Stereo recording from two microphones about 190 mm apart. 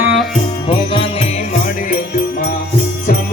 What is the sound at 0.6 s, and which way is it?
Music, 30° left (ahead or behind).